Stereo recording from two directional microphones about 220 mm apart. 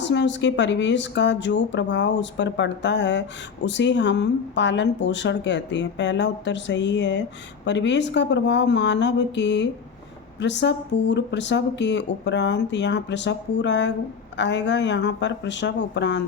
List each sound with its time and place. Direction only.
0.0 s speech: 55° left (ahead or behind)